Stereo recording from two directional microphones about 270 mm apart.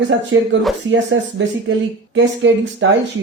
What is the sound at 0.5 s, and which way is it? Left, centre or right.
Speech, right.